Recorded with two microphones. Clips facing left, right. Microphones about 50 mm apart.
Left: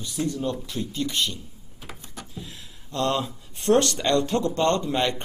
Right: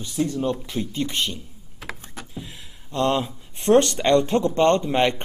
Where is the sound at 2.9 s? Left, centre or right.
Right.